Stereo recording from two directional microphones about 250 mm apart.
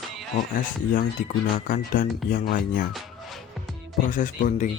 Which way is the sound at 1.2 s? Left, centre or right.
Left.